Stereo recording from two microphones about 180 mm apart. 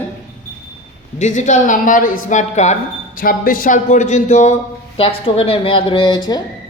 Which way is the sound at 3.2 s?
50° left (ahead or behind).